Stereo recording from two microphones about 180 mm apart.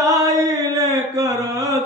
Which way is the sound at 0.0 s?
20° right (ahead or behind).